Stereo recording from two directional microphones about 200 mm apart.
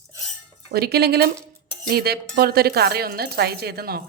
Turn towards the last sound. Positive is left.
turn(degrees=-50)  # may be behind; listen again after turning